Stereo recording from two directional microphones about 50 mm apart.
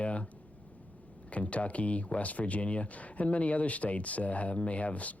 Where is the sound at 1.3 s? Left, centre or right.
Left.